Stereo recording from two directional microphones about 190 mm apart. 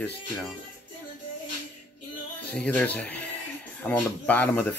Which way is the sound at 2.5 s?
5° left (ahead or behind).